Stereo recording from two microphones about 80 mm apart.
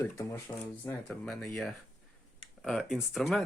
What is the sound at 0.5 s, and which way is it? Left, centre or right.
Speech, left.